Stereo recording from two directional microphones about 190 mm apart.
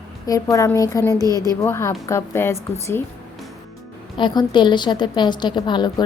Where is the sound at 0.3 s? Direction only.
20° left (ahead or behind).